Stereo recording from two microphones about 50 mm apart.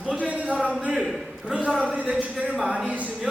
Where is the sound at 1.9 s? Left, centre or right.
Right.